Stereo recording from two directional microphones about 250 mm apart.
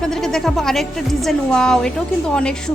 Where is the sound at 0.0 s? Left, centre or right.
Centre.